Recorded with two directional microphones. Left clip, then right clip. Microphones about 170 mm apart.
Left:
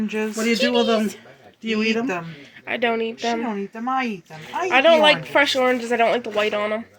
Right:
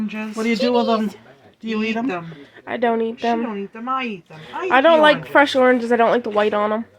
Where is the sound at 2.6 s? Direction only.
20° right (ahead or behind).